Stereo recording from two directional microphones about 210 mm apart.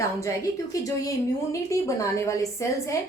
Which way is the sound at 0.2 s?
15° left (ahead or behind).